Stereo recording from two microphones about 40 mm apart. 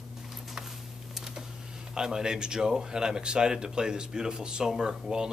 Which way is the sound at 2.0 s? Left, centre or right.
Centre.